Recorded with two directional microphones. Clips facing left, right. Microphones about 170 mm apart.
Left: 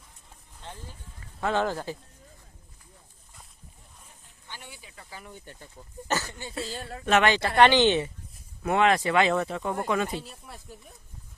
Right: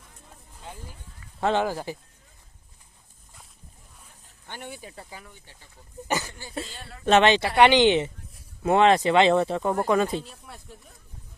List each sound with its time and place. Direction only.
0.7 s speech: 10° right (ahead or behind)
4.4 s speech: 55° right (ahead or behind)
5.3 s speech: 50° left (ahead or behind)
6.1 s speech: 15° right (ahead or behind)
6.7 s speech: 40° left (ahead or behind)
7.0 s speech: 25° right (ahead or behind)
8.6 s speech: 30° right (ahead or behind)
10.2 s speech: centre (ahead or behind)